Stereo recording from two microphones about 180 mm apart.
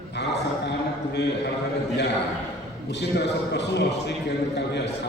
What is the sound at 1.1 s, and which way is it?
Speech, 70° left (ahead or behind).